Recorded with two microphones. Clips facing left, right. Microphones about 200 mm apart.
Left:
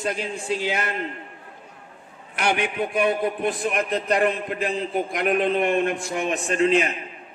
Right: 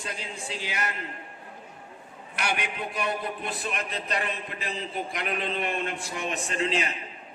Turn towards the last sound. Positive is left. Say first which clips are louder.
# left 8 dB
turn(degrees=55)  # may be behind; listen again after turning